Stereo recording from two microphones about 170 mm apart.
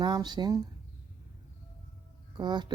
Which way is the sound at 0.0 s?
25° right (ahead or behind).